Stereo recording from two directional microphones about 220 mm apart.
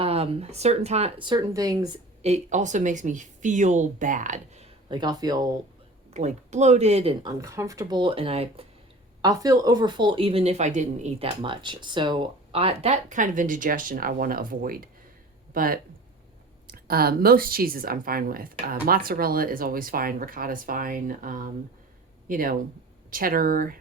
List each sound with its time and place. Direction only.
0.0 s speech: 30° right (ahead or behind)
2.2 s speech: 30° right (ahead or behind)
6.1 s speech: 30° right (ahead or behind)